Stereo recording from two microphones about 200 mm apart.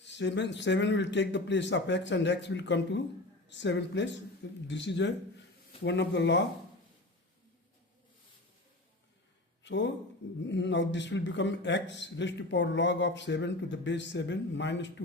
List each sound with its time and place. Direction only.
0.0 s a man's voice: 60° left (ahead or behind)
9.6 s a man's voice: 60° left (ahead or behind)